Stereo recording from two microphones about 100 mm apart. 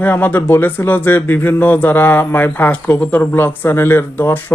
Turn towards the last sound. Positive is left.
turn(degrees=20)  # may be behind; listen again after turning